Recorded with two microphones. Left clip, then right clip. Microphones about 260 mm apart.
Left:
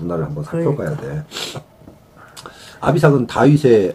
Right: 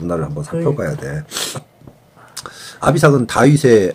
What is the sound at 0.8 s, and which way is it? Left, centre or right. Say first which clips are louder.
Speech: right 2 dB; right.